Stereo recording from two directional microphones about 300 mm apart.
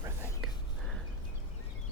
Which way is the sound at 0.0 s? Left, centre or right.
Centre.